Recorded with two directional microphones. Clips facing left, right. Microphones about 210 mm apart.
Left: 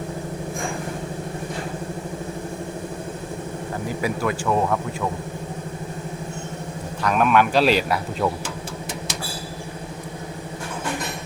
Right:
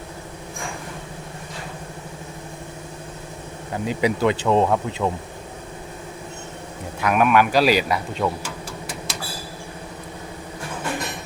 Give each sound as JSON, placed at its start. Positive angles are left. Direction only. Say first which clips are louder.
{"t": 3.8, "sound": "speech", "louder": "right 5 dB", "side_deg": -20}
{"t": 7.0, "sound": "speech", "louder": "right 1 dB", "side_deg": -5}